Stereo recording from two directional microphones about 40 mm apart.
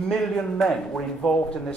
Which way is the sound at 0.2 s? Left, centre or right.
Centre.